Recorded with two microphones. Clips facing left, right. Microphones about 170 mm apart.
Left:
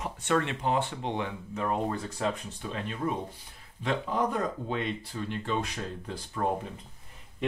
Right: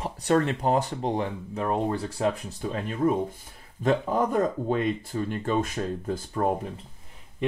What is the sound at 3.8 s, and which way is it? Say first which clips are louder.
Speech: right 5 dB; 45° right (ahead or behind).